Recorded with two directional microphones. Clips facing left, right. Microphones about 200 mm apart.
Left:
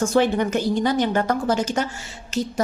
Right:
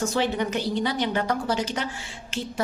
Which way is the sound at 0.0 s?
50° left (ahead or behind).